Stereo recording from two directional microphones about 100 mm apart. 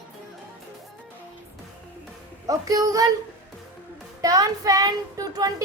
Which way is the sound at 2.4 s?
35° right (ahead or behind).